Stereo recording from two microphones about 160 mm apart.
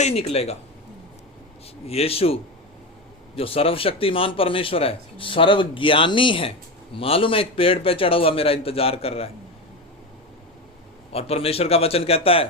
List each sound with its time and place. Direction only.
0.0 s speech: 40° left (ahead or behind)
1.9 s speech: 40° left (ahead or behind)
11.1 s speech: 40° left (ahead or behind)